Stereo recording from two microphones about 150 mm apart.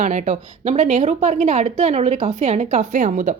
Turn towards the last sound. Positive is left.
turn(degrees=-55)  # may be behind; listen again after turning